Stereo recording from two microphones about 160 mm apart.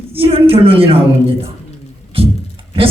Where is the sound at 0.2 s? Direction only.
35° right (ahead or behind).